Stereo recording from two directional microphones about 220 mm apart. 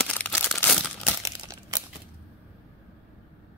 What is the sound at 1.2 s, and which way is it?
Crumpling, 15° right (ahead or behind).